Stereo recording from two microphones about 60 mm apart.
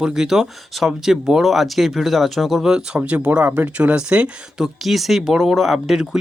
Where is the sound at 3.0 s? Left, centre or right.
Right.